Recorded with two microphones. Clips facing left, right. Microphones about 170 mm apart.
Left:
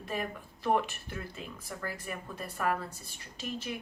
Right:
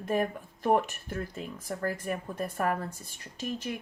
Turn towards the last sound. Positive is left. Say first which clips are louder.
# right 4 dB
turn(degrees=-45)  # may be behind; listen again after turning